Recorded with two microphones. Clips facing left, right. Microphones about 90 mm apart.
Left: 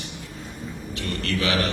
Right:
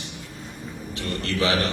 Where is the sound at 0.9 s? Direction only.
30° right (ahead or behind).